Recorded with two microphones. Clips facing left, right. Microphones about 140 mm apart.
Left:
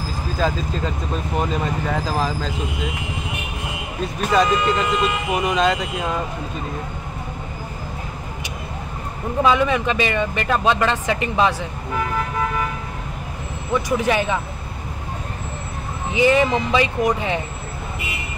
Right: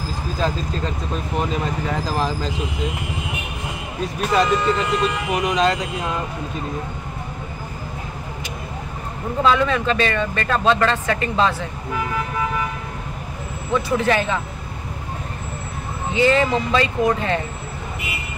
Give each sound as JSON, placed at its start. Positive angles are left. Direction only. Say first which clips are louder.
{"t": 0.4, "sound": "speech", "louder": "left 1 dB", "side_deg": 0}
{"t": 4.0, "sound": "speech", "louder": "left 1 dB", "side_deg": 0}
{"t": 9.4, "sound": "speech", "louder": "left 1 dB", "side_deg": 15}
{"t": 13.8, "sound": "speech", "louder": "even", "side_deg": 15}
{"t": 16.1, "sound": "speech", "louder": "left 1 dB", "side_deg": 15}